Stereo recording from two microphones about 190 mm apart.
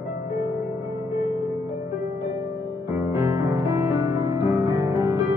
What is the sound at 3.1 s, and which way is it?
Music, 15° right (ahead or behind).